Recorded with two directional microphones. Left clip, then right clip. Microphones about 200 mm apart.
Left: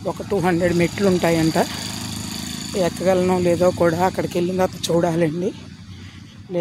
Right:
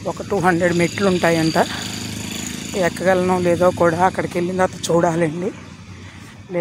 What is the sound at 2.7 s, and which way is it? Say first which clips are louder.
Speech: right 2 dB; 10° left (ahead or behind).